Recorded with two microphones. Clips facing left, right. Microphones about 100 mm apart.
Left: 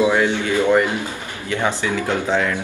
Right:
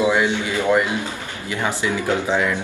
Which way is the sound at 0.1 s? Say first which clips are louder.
Left 2 dB; 15° right (ahead or behind).